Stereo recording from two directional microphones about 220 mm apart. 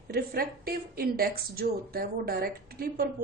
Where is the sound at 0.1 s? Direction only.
45° right (ahead or behind).